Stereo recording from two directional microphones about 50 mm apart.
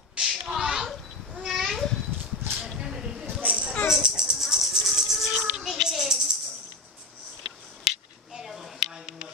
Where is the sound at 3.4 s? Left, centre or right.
Right.